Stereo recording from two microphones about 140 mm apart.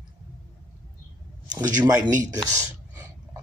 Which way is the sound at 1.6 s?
25° right (ahead or behind).